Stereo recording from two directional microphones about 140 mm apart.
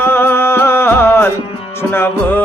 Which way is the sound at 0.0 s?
15° left (ahead or behind).